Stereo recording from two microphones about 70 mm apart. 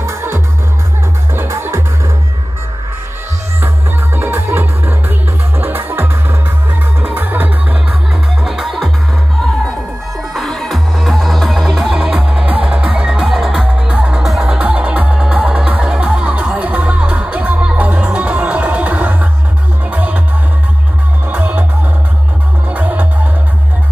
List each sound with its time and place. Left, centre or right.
0.0 s music: right
3.6 s music: right
8.5 s music: centre
10.3 s music: centre
12.1 s music: centre
14.6 s music: centre
21.3 s music: right
22.7 s music: right